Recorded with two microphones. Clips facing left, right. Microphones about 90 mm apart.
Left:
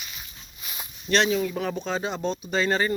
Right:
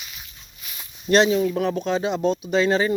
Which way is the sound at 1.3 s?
5° right (ahead or behind).